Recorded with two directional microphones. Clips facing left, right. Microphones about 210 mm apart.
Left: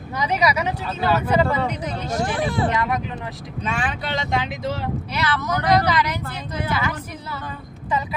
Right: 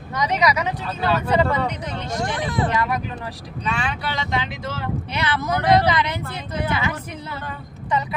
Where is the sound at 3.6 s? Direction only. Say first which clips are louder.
Even; 50° left (ahead or behind).